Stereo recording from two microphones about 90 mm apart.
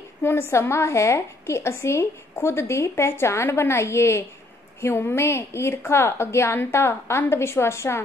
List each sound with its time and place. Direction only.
0.2 s a woman's voice: 30° left (ahead or behind)